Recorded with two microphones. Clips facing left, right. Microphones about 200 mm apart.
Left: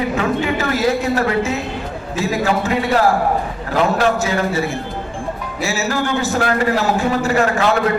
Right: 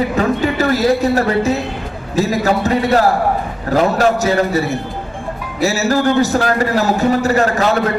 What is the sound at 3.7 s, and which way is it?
Music, 40° right (ahead or behind).